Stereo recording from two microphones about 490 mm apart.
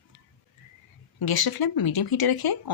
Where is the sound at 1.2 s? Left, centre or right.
Left.